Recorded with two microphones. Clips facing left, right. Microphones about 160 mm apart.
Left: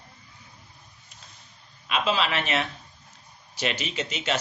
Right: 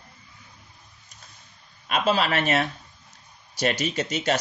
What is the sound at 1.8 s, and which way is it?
Speech, 45° right (ahead or behind).